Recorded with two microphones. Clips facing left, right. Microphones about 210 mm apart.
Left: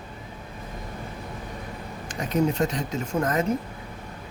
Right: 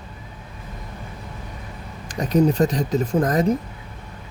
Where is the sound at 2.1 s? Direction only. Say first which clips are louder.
Right 6 dB; 35° right (ahead or behind).